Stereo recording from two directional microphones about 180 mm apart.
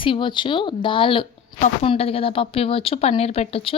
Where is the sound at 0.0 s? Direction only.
25° left (ahead or behind).